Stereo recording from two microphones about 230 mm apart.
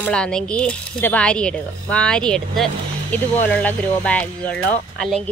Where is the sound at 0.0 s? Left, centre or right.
Centre.